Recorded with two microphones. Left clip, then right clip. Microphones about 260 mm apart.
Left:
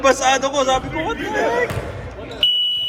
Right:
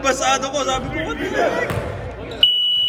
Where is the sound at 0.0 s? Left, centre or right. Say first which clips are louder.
Left 3 dB; left.